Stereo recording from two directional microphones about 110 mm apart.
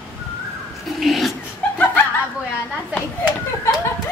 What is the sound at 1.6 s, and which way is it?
Chuckle, 10° left (ahead or behind).